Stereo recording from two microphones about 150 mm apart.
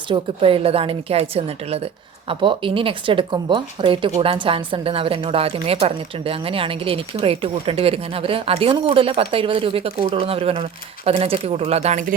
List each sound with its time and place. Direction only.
0.1 s speech: 35° right (ahead or behind)